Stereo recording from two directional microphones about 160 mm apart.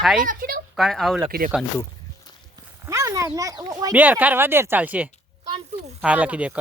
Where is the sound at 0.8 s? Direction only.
Centre (ahead or behind).